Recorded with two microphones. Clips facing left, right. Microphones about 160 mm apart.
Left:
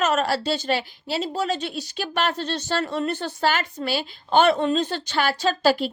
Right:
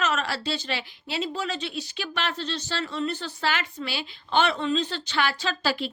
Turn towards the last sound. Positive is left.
turn(degrees=45)  # may be behind; listen again after turning